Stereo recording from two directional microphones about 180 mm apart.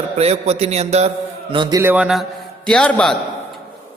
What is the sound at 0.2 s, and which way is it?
A man's voice, 35° right (ahead or behind).